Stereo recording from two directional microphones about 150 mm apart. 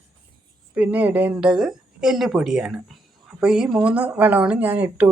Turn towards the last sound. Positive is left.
turn(degrees=-10)  # may be behind; listen again after turning